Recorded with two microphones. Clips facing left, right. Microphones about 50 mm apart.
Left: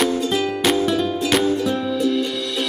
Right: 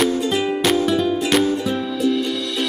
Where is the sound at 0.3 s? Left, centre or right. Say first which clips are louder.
Right 1 dB; centre.